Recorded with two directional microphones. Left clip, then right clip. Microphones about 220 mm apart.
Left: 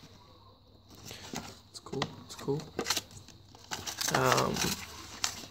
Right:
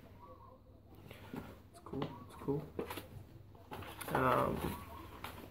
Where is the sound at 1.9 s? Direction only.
45° left (ahead or behind).